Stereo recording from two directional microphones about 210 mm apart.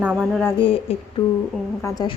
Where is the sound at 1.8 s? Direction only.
15° left (ahead or behind).